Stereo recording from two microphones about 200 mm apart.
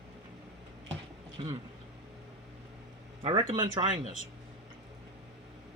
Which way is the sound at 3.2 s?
25° right (ahead or behind).